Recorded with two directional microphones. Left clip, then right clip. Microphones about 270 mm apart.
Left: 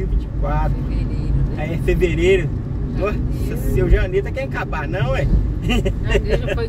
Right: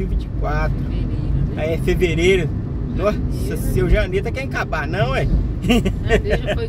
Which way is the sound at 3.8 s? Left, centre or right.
Centre.